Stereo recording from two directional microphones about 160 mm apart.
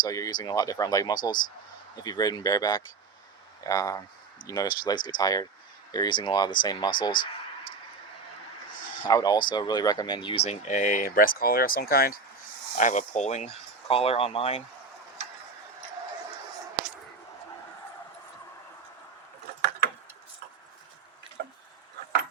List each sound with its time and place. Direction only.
0.0 s speech: 25° left (ahead or behind)
9.0 s speech: 25° left (ahead or behind); by 12.2 s 70° left (ahead or behind)
12.7 s speech: 50° left (ahead or behind)